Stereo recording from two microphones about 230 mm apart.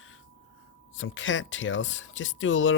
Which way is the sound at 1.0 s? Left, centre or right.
Left.